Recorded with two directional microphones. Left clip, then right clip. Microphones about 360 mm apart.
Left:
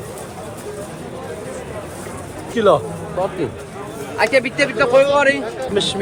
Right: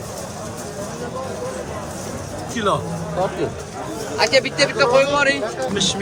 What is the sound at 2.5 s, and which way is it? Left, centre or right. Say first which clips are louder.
Speech: left 7 dB; centre.